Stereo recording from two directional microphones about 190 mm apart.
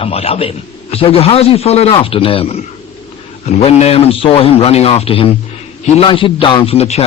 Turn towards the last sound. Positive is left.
turn(degrees=35)  # may be behind; listen again after turning